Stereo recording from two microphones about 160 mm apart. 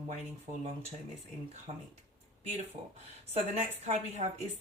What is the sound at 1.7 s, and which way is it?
Speech, 45° right (ahead or behind).